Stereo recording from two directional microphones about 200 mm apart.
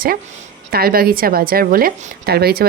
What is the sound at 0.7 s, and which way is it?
A woman's voice, 50° right (ahead or behind).